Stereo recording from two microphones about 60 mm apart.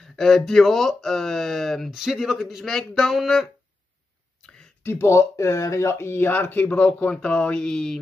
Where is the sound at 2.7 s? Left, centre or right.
Centre.